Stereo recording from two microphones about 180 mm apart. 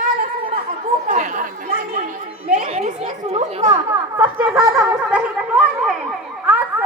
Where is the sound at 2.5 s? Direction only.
40° right (ahead or behind).